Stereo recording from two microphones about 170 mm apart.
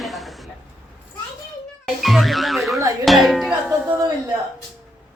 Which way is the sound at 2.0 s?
Centre (ahead or behind).